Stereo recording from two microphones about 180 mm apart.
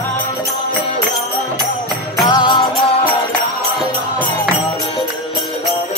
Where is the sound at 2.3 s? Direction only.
25° left (ahead or behind).